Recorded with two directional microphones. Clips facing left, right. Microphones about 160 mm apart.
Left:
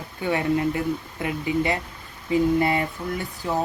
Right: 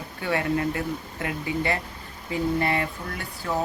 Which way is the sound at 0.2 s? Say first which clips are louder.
Left 3 dB; 20° left (ahead or behind).